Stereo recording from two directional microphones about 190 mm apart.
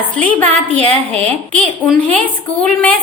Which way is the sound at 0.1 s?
10° left (ahead or behind).